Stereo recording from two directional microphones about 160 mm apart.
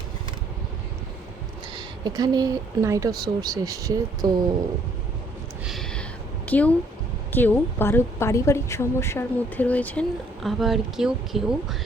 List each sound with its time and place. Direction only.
2.0 s speech: 25° right (ahead or behind)
5.6 s a sound: centre (ahead or behind)
6.5 s a woman's voice: 10° left (ahead or behind)